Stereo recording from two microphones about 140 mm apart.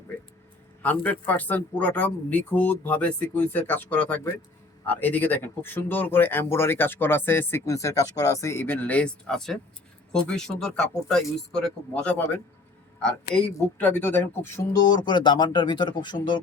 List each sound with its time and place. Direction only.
0.8 s speech: 10° left (ahead or behind); by 16.4 s 35° left (ahead or behind)